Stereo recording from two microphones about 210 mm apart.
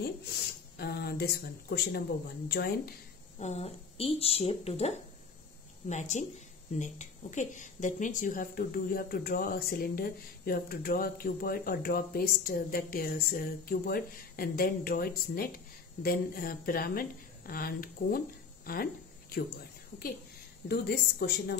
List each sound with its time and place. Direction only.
0.0 s speech: 50° left (ahead or behind)
3.3 s speech: 30° left (ahead or behind)
19.3 s a sound: 45° left (ahead or behind)
20.6 s speech: 50° left (ahead or behind)